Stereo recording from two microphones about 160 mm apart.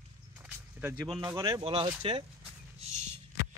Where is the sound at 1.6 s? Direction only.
35° right (ahead or behind).